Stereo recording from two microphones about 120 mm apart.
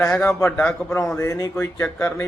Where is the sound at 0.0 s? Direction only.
20° left (ahead or behind).